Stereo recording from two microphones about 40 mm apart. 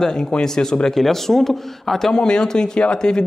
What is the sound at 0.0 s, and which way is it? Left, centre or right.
A man's voice, centre.